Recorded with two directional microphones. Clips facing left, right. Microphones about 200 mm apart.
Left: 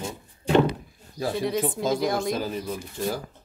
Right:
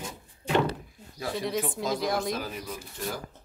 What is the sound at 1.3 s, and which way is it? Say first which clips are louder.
Speech: left 3 dB; centre (ahead or behind).